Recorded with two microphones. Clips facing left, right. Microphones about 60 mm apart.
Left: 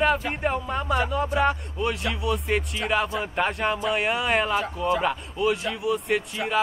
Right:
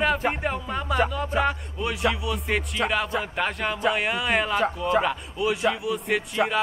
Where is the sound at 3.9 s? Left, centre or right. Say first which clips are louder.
Left 1 dB; centre.